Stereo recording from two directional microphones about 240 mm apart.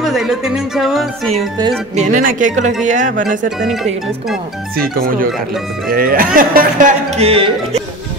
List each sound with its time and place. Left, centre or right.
0.0 s speech: centre
2.0 s speech: right
3.4 s speech: centre
4.9 s speech: right